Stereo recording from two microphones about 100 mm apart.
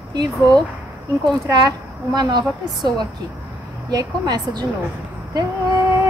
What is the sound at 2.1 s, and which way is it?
Speech, 45° right (ahead or behind).